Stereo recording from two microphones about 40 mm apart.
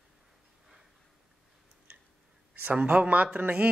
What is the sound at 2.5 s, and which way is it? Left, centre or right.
Speech, right.